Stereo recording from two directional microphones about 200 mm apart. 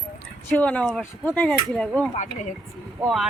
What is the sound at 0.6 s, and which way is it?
Speech, 5° left (ahead or behind).